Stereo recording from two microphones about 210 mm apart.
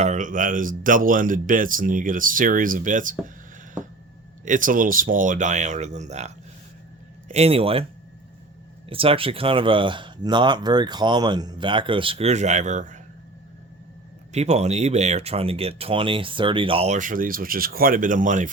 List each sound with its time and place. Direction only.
0.0 s speech: 35° right (ahead or behind)
4.4 s speech: 40° right (ahead or behind)
8.9 s speech: 25° right (ahead or behind)
14.3 s speech: 30° right (ahead or behind)